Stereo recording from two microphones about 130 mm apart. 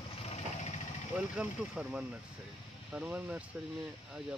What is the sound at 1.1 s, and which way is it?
Speech, 10° right (ahead or behind).